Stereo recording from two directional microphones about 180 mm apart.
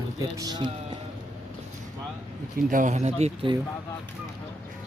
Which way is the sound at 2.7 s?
45° right (ahead or behind).